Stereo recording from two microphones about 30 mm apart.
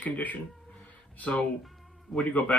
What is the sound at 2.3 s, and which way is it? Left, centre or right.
Speech, left.